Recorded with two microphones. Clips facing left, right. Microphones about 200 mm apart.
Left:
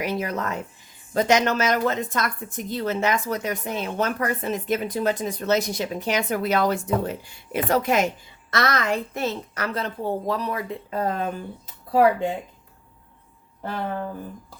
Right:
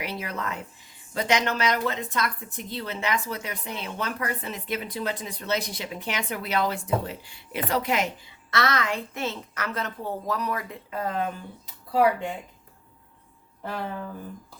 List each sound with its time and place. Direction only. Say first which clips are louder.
0.0 s a woman's voice: left 6 dB; 45° left (ahead or behind)